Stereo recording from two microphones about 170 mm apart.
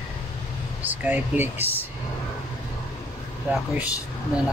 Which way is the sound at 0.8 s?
10° right (ahead or behind).